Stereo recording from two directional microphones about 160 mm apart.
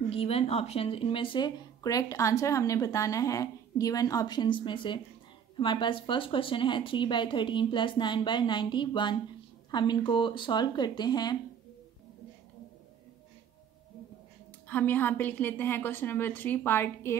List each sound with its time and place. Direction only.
0.1 s speech: 35° left (ahead or behind)
14.7 s a woman's voice: 10° left (ahead or behind)